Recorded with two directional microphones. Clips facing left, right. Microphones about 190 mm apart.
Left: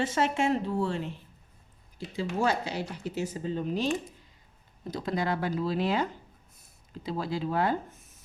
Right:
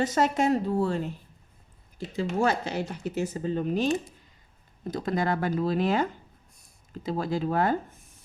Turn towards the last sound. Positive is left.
turn(degrees=-50)  # may be behind; listen again after turning